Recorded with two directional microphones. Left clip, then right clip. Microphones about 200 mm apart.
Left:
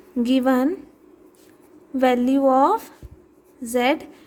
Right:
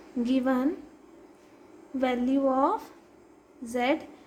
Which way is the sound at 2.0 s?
50° left (ahead or behind).